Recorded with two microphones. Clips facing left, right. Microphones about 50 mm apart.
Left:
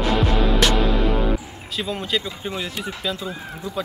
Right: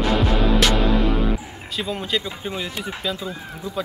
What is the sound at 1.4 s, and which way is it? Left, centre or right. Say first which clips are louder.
Guitar: right 1 dB; right.